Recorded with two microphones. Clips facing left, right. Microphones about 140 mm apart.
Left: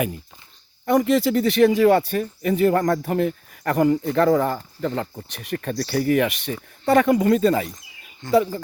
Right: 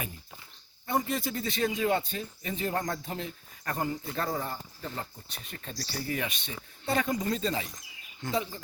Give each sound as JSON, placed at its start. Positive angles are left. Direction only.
{"t": 0.9, "sound": "speech", "side_deg": 85}
{"t": 8.3, "sound": "speech", "side_deg": 65}